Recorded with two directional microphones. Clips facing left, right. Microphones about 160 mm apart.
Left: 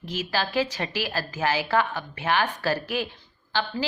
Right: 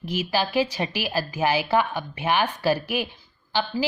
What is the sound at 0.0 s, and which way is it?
A woman's voice, 10° right (ahead or behind).